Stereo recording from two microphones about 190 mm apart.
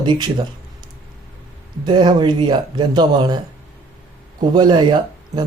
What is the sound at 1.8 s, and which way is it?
Speech, 25° right (ahead or behind).